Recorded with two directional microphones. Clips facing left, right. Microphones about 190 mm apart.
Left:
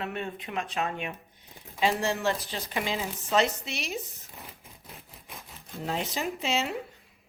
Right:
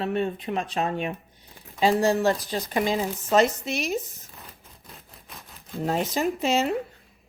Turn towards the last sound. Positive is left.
turn(degrees=-45)  # may be behind; listen again after turning